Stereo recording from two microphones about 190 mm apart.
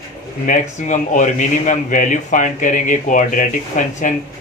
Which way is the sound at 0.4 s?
40° left (ahead or behind).